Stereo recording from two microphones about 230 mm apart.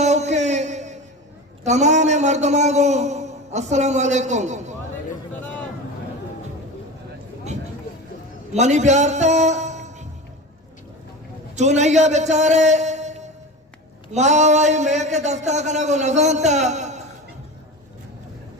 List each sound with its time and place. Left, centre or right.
0.0 s music: right
1.6 s a man's voice: right
8.5 s a man's voice: right
11.5 s a man's voice: right